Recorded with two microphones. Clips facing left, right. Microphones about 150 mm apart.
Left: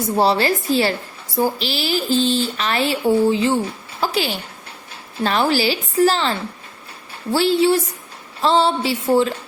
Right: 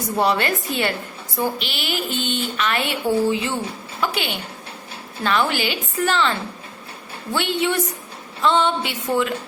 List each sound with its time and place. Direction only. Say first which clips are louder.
0.2 s speech: left 3 dB; 30° left (ahead or behind)
7.3 s speech: left 6 dB; 35° left (ahead or behind)